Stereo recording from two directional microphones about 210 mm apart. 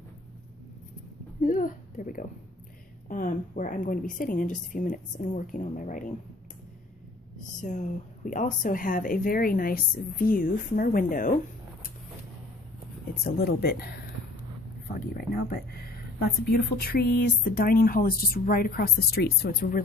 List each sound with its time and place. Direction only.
1.4 s a sound: 40° left (ahead or behind)
3.1 s speech: 40° left (ahead or behind)
7.3 s speech: 35° left (ahead or behind)
13.2 s speech: 50° left (ahead or behind)
15.0 s speech: 45° left (ahead or behind)